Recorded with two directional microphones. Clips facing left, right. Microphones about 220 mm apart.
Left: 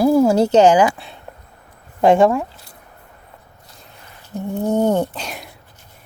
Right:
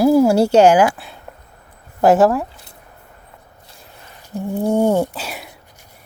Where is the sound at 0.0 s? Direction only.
10° right (ahead or behind).